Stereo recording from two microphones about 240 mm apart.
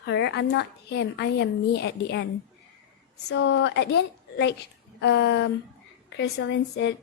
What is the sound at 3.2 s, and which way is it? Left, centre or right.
Speech, left.